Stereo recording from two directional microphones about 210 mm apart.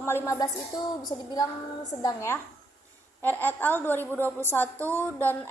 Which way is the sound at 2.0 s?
15° left (ahead or behind).